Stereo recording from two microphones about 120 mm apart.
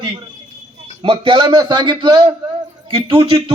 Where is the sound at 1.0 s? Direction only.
50° right (ahead or behind).